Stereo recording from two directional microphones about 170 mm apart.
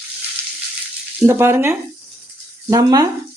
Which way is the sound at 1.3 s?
15° right (ahead or behind).